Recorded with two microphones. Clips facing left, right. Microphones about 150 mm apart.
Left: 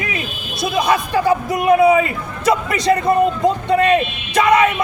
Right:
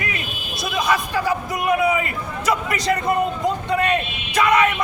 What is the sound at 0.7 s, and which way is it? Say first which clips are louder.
A man's voice: left 4 dB; 30° left (ahead or behind).